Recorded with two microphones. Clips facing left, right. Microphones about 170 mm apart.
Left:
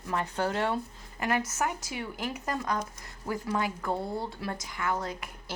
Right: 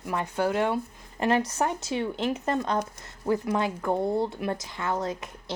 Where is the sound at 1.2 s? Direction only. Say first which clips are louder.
Right 5 dB; 25° right (ahead or behind).